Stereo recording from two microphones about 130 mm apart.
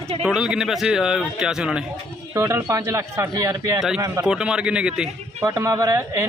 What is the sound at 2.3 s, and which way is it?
A man's voice, 20° right (ahead or behind).